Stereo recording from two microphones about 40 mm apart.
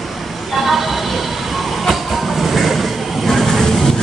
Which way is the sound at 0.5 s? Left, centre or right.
Centre.